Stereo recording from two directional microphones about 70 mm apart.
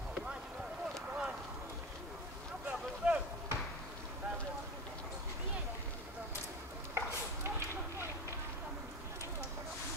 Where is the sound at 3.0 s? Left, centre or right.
Right.